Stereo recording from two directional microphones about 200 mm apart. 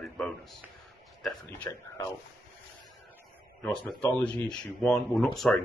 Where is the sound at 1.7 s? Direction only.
15° left (ahead or behind).